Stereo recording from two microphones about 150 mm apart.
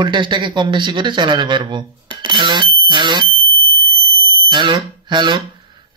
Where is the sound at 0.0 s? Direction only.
30° right (ahead or behind).